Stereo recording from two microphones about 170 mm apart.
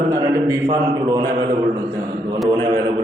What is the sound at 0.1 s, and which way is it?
A man's voice, 20° right (ahead or behind).